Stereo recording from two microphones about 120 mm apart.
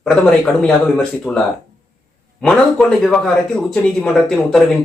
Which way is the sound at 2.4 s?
10° left (ahead or behind).